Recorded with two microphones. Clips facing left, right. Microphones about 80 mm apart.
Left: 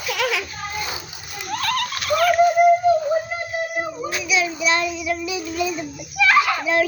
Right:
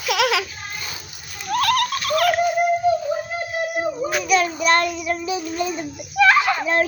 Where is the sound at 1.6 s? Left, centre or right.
Right.